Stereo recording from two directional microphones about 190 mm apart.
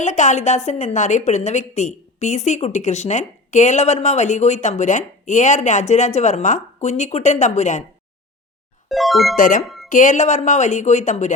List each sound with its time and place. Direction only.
0.0 s a woman's voice: 40° left (ahead or behind)
8.9 s speech: centre (ahead or behind)
9.3 s speech: 45° left (ahead or behind)
9.6 s a sound: centre (ahead or behind)
9.9 s a woman's voice: 40° left (ahead or behind)